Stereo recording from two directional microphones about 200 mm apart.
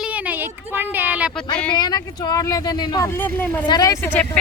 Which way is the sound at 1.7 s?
20° left (ahead or behind).